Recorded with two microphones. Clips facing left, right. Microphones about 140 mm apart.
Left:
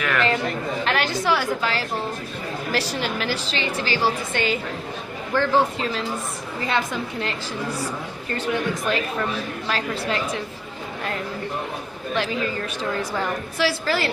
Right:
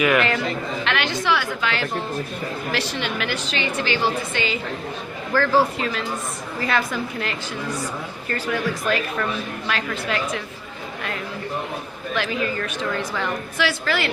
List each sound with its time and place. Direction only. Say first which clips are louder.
0.0 s a man's voice: right 4 dB; 10° right (ahead or behind)
0.9 s a woman's voice: left 1 dB; 40° left (ahead or behind)
4.3 s a woman's voice: left 1 dB; 50° left (ahead or behind)
5.8 s a woman's voice: even; 30° left (ahead or behind)
12.1 s a woman's voice: even; 30° left (ahead or behind)